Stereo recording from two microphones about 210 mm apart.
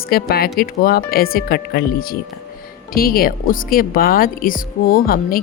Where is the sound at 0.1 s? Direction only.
45° left (ahead or behind).